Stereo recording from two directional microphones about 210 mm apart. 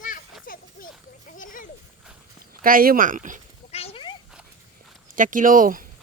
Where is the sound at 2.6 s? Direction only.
45° right (ahead or behind).